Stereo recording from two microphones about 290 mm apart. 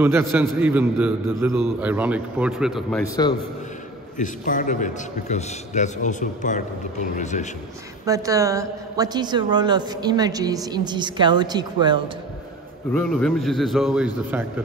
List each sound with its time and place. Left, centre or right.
0.0 s a man's voice: centre
3.2 s a man's voice: centre
4.2 s a man's voice: left
8.0 s a woman's voice: centre
12.9 s a man's voice: centre